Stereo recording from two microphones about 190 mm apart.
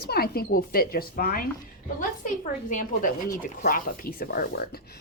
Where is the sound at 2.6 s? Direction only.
45° left (ahead or behind).